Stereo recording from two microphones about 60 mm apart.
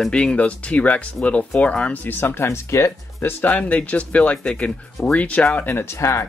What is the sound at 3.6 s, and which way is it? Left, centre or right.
Speech, left.